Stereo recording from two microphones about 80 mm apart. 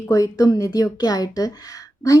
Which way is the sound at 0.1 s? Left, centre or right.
Left.